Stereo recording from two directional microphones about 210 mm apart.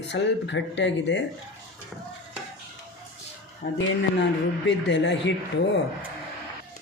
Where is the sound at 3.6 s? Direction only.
55° left (ahead or behind).